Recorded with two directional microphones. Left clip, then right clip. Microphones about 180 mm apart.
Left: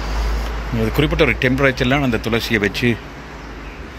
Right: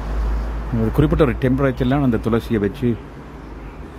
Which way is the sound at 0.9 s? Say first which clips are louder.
Left 1 dB; 30° right (ahead or behind).